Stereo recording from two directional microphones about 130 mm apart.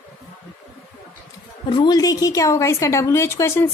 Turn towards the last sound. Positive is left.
turn(degrees=20)  # may be behind; listen again after turning